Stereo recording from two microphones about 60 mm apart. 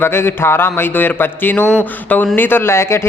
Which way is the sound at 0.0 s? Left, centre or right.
Left.